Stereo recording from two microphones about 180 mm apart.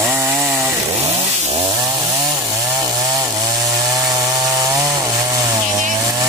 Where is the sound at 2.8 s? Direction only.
20° right (ahead or behind).